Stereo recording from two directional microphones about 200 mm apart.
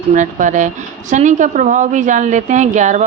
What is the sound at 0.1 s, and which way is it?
A woman's voice, 40° right (ahead or behind).